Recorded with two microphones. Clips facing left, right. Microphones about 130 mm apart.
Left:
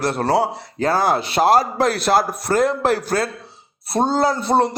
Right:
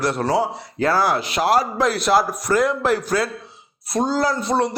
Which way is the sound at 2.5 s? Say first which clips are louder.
Left 2 dB; 30° left (ahead or behind).